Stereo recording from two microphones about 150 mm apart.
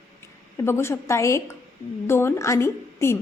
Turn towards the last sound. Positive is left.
turn(degrees=15)  # may be behind; listen again after turning